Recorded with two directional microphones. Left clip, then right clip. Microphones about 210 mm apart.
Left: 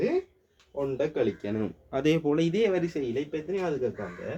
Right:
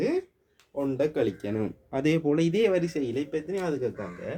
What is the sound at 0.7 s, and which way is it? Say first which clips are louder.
Speech: right 2 dB; 45° right (ahead or behind).